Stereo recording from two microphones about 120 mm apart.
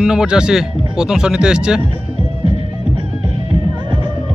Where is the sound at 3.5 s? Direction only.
40° right (ahead or behind).